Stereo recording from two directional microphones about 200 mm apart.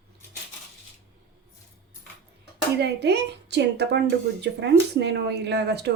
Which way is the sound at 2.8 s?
55° right (ahead or behind).